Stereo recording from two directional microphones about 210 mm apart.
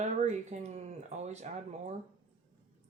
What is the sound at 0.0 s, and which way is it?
Speech, 35° right (ahead or behind).